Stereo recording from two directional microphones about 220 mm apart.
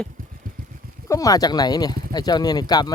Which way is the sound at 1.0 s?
15° left (ahead or behind).